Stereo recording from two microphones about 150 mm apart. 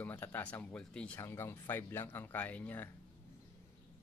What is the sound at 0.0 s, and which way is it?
Speech, 10° left (ahead or behind).